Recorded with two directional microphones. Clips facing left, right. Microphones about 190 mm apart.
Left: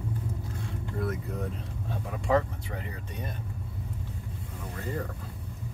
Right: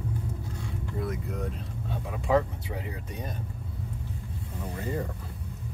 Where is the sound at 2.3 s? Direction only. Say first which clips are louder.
Right 1 dB; 5° right (ahead or behind).